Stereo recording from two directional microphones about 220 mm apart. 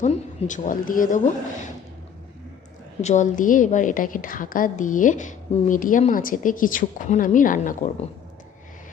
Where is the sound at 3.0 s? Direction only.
35° left (ahead or behind).